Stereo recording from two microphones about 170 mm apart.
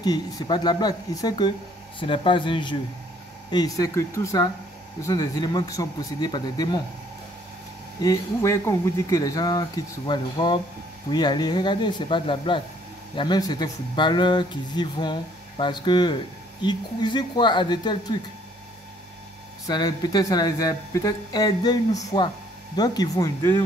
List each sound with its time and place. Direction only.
0.0 s speech: 25° left (ahead or behind)
8.0 s speech: 20° left (ahead or behind)
19.6 s speech: 25° left (ahead or behind)